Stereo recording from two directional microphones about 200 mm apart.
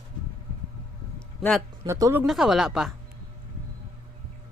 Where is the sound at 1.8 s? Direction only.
15° right (ahead or behind).